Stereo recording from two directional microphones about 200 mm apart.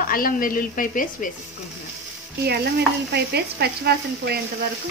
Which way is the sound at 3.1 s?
55° right (ahead or behind).